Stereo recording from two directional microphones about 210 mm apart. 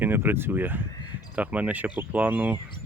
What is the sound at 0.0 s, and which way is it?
Speech, 10° right (ahead or behind).